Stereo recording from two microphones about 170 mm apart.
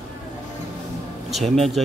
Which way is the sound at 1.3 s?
Centre (ahead or behind).